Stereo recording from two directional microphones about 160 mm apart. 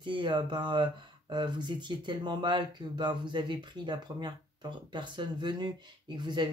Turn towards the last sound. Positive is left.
turn(degrees=-30)  # may be behind; listen again after turning